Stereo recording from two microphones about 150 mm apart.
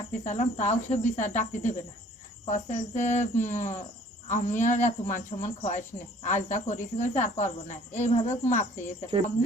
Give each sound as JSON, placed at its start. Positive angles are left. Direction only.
{"t": 0.3, "sound": "speech", "side_deg": 45}